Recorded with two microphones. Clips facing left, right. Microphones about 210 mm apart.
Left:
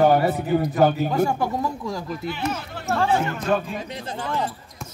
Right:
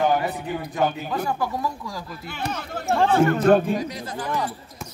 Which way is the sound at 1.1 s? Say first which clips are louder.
Left 4 dB; 25° left (ahead or behind).